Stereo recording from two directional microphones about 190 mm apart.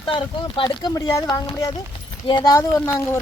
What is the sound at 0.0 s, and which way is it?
Speech, 25° left (ahead or behind).